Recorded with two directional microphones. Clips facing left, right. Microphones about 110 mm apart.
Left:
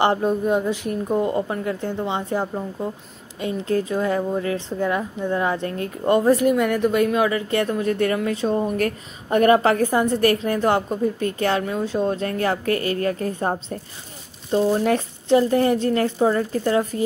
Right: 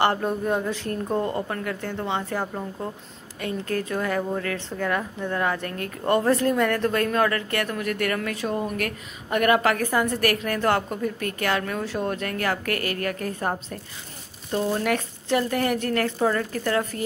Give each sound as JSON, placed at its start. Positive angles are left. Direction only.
{"t": 0.0, "sound": "speech", "side_deg": 20}